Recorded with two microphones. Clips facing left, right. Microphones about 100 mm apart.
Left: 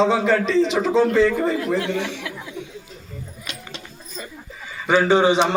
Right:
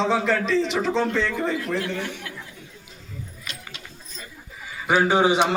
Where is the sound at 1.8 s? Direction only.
90° left.